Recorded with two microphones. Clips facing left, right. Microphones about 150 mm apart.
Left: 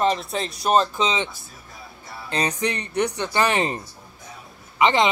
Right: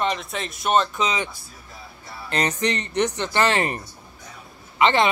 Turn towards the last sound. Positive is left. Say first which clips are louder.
# even
turn(degrees=15)  # may be behind; listen again after turning